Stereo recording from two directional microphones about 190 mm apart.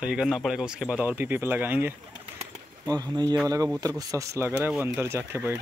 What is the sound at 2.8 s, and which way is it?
Speech, 20° right (ahead or behind).